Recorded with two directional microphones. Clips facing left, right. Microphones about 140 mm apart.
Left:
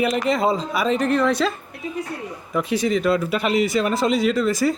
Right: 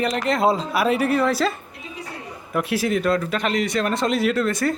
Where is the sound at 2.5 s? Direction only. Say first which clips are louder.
Left 1 dB; 5° right (ahead or behind).